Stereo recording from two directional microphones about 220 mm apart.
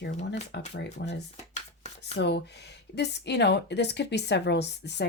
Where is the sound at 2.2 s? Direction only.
50° left (ahead or behind).